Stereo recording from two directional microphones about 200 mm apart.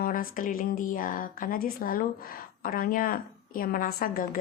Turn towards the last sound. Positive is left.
turn(degrees=45)  # may be behind; listen again after turning